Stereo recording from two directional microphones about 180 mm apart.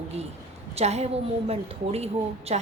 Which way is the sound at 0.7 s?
35° right (ahead or behind).